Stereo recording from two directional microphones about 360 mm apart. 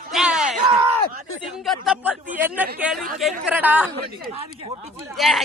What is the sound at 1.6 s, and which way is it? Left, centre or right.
Speech, centre.